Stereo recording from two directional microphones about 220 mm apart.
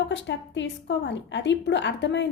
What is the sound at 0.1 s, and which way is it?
A woman's voice, 55° left (ahead or behind).